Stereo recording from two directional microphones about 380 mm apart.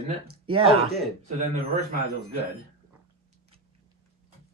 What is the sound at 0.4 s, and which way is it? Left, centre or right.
Speech, centre.